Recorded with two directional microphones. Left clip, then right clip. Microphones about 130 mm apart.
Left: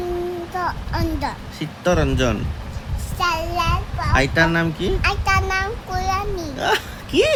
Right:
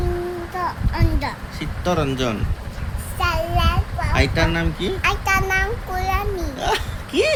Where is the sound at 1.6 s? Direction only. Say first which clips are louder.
Left 2 dB; 45° left (ahead or behind).